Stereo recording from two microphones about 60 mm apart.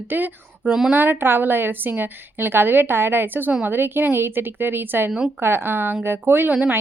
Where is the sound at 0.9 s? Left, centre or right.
Right.